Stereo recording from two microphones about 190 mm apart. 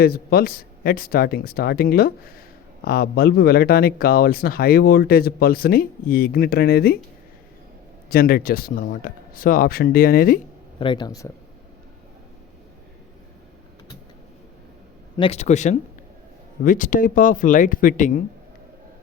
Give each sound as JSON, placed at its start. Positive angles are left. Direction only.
{"t": 0.0, "sound": "speech", "side_deg": 55}
{"t": 8.1, "sound": "speech", "side_deg": 50}
{"t": 10.8, "sound": "speech", "side_deg": 25}
{"t": 15.2, "sound": "speech", "side_deg": 35}